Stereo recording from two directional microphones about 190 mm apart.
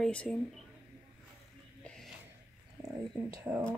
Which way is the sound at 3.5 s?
10° right (ahead or behind).